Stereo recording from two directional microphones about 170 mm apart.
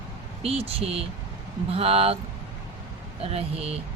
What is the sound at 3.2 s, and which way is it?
Speech, 35° right (ahead or behind).